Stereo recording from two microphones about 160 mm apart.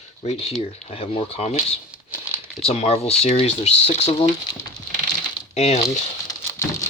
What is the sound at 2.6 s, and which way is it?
Speech, 40° left (ahead or behind).